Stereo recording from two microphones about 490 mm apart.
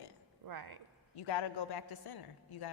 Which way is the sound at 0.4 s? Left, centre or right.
Right.